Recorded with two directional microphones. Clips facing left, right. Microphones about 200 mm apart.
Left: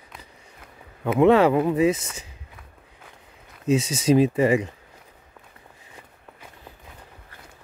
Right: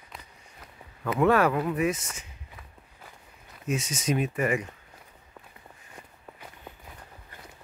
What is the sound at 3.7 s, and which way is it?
Speech, 30° left (ahead or behind).